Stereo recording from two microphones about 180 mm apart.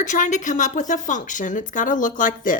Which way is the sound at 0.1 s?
45° left (ahead or behind).